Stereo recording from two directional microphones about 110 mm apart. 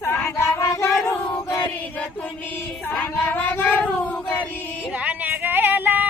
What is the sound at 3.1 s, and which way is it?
Singing, 15° left (ahead or behind).